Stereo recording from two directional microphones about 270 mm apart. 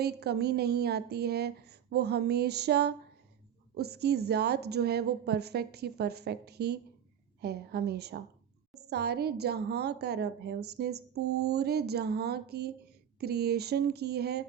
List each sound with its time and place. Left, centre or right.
0.0 s a woman's voice: right